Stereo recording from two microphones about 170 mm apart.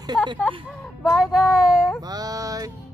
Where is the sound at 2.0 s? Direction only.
20° right (ahead or behind).